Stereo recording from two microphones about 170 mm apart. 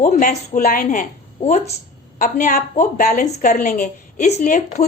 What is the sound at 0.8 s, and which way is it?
A woman's voice, 45° left (ahead or behind).